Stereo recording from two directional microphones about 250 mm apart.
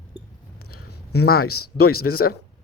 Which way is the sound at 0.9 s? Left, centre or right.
Left.